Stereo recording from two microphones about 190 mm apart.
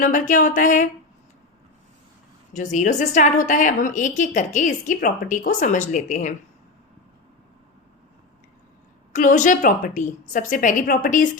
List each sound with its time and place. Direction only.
0.0 s a woman's voice: 40° left (ahead or behind)
2.5 s a woman's voice: 40° left (ahead or behind)
9.1 s a woman's voice: 40° left (ahead or behind)